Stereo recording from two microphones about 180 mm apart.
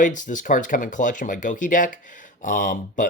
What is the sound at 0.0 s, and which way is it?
Speech, 45° left (ahead or behind).